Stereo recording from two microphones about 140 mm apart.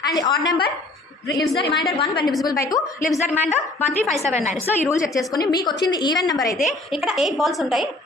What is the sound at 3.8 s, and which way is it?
A woman's voice, 50° left (ahead or behind).